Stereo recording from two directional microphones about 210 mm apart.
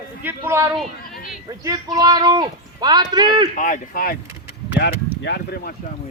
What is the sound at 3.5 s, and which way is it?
Speech, 40° left (ahead or behind).